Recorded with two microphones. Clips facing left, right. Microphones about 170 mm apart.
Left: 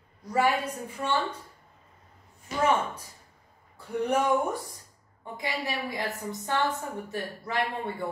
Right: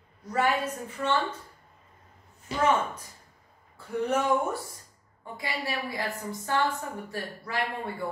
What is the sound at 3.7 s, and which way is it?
A woman's voice, 15° left (ahead or behind).